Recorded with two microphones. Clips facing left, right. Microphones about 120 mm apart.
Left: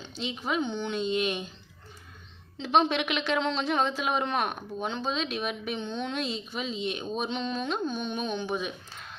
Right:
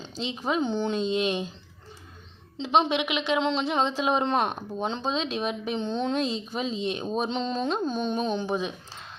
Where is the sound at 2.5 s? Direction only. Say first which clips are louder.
Right 1 dB; 25° right (ahead or behind).